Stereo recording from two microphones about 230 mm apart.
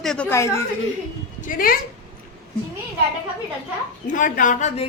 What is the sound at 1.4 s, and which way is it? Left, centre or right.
Speech, left.